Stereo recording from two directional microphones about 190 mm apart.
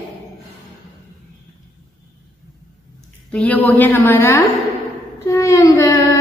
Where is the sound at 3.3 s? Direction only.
5° left (ahead or behind).